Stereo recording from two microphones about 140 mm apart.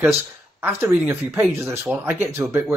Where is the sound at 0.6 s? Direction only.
15° right (ahead or behind).